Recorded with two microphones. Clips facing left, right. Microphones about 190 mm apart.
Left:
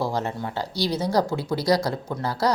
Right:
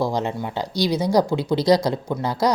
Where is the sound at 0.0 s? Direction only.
15° right (ahead or behind).